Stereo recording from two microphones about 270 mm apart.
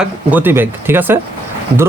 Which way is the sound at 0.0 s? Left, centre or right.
Centre.